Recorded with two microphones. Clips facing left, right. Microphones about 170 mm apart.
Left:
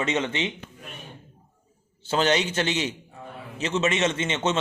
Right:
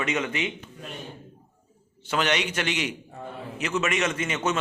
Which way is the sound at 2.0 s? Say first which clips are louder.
Left 3 dB; 30° left (ahead or behind).